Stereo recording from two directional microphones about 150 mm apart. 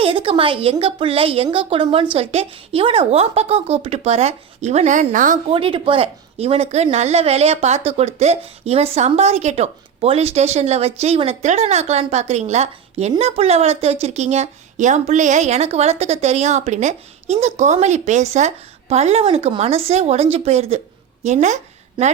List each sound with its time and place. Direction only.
0.0 s speech: 40° right (ahead or behind); by 5.4 s 60° right (ahead or behind)
5.5 s speech: 35° right (ahead or behind)
21.4 s a sound: 50° right (ahead or behind)